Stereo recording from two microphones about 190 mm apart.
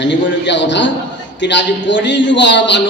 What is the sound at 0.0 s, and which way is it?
A man's voice, 70° left (ahead or behind).